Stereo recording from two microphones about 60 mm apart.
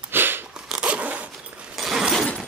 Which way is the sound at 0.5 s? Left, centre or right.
Centre.